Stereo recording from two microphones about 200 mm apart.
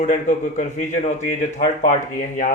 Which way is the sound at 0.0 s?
40° left (ahead or behind).